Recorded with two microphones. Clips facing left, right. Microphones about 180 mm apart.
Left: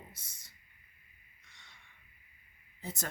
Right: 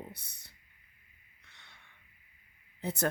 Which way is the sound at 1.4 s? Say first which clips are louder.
Right 2 dB; 65° right (ahead or behind).